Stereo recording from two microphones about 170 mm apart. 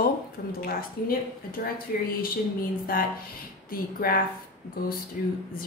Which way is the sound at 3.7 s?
60° left (ahead or behind).